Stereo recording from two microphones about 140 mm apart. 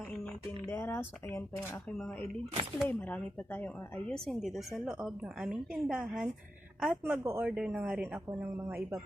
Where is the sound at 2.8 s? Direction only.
15° left (ahead or behind).